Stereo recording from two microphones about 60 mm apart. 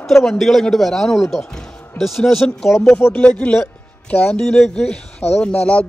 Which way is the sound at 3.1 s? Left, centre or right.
Left.